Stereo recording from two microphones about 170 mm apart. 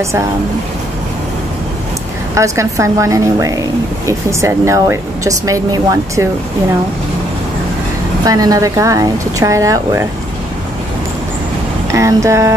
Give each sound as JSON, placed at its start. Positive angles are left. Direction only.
{"t": 2.3, "sound": "speech", "side_deg": -15}
{"t": 8.3, "sound": "speech", "side_deg": -20}
{"t": 11.9, "sound": "speech", "side_deg": -20}